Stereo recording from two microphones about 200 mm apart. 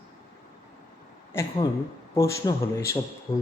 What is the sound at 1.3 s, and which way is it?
Speech, 15° left (ahead or behind).